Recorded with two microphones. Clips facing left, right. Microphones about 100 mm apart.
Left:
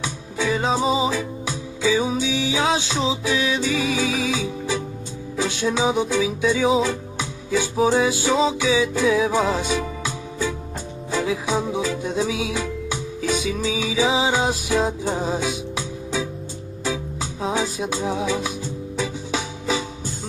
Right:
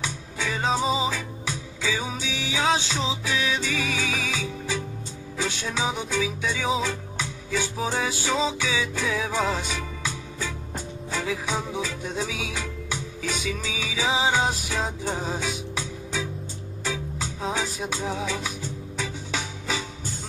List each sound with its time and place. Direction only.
0.0 s music: 15° left (ahead or behind)